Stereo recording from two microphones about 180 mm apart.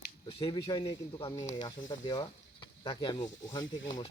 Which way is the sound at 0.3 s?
30° left (ahead or behind).